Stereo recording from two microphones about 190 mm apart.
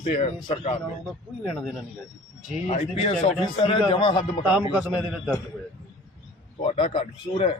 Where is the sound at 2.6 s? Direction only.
30° left (ahead or behind).